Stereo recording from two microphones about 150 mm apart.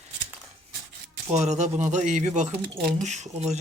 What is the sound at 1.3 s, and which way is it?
Speech, 50° right (ahead or behind).